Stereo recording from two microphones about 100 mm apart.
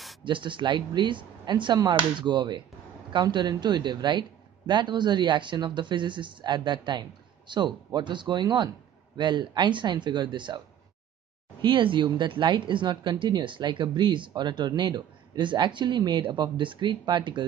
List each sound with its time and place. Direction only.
0.2 s speech: 55° right (ahead or behind)
11.6 s speech: 55° right (ahead or behind)